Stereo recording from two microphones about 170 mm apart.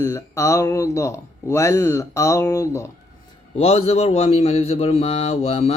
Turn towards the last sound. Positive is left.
turn(degrees=35)  # may be behind; listen again after turning